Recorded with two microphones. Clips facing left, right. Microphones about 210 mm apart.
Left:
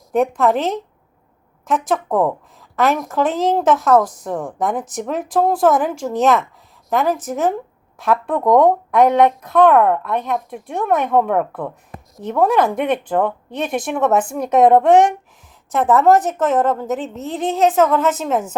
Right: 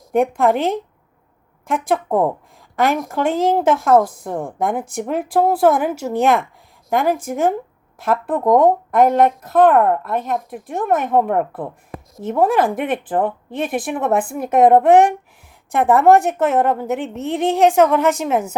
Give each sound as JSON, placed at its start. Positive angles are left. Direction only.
{"t": 0.1, "sound": "a woman's voice", "side_deg": -10}
{"t": 2.7, "sound": "a woman's voice", "side_deg": -10}